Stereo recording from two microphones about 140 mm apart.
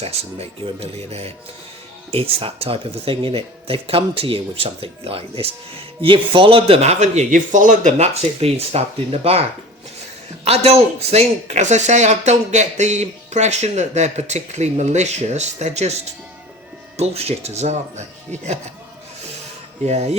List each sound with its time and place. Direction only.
0.0 s speech: 45° right (ahead or behind)
10.4 s speech: 50° right (ahead or behind)
17.0 s speech: 50° right (ahead or behind)
19.8 s speech: 50° right (ahead or behind)